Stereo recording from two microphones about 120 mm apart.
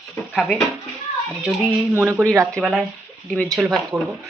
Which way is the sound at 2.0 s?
20° right (ahead or behind).